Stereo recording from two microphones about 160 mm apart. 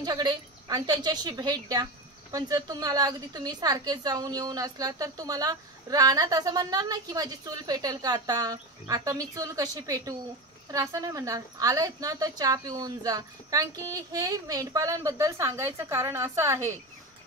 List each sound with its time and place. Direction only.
0.0 s a woman's voice: 25° right (ahead or behind)